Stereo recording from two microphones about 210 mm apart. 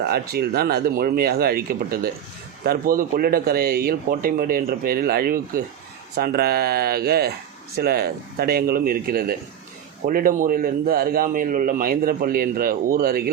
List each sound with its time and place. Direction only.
0.0 s a man's voice: 45° right (ahead or behind)